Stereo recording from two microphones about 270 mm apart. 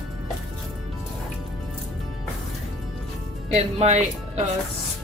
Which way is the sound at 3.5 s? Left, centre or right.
Right.